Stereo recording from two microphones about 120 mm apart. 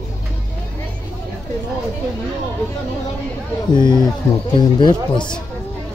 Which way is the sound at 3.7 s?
35° left (ahead or behind).